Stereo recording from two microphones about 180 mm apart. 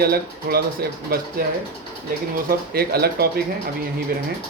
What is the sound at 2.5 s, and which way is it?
Speech, 60° right (ahead or behind).